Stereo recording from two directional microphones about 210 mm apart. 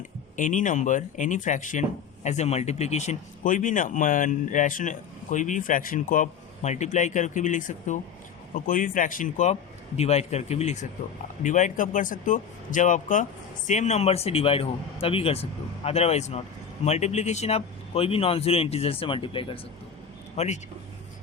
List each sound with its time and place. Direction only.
0.3 s speech: 40° left (ahead or behind)